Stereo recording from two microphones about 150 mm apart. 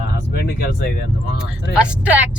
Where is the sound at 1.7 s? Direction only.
10° right (ahead or behind).